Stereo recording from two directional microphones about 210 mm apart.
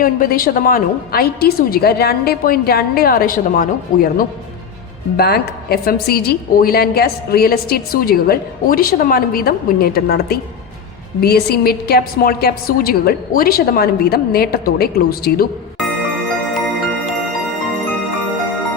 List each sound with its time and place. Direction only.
0.0 s a woman's voice: 45° left (ahead or behind)